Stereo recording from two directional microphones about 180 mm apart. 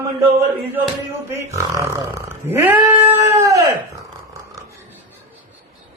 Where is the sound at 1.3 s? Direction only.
15° right (ahead or behind).